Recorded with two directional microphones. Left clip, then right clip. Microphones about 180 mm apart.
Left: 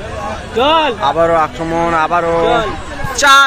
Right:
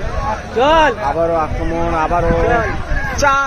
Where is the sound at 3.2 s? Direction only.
5° left (ahead or behind).